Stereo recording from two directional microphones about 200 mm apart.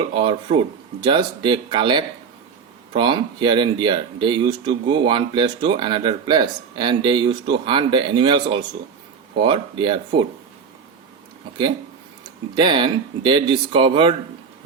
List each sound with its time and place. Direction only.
0.1 s speech: 25° right (ahead or behind)
12.5 s speech: 25° right (ahead or behind)